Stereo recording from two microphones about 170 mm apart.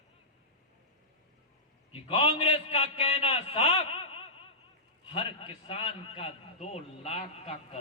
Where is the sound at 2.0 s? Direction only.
35° left (ahead or behind).